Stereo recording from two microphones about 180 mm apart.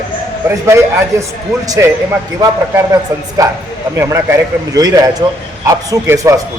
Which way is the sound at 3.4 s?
20° right (ahead or behind).